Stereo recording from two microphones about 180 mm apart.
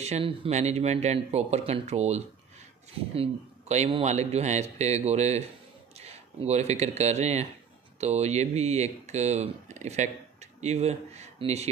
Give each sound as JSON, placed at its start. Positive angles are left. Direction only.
{"t": 0.0, "sound": "speech", "side_deg": -35}